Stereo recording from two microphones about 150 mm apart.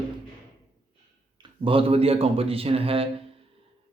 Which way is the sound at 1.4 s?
35° right (ahead or behind).